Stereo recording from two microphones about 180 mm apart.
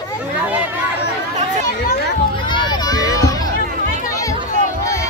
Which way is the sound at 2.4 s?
25° left (ahead or behind).